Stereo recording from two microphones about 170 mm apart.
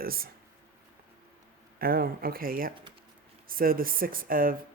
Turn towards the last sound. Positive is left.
turn(degrees=-55)  # may be behind; listen again after turning